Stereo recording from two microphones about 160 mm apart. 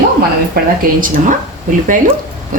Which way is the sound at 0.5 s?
60° right (ahead or behind).